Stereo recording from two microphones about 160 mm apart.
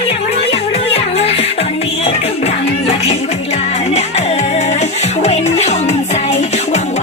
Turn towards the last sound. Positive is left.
turn(degrees=45)  # may be behind; listen again after turning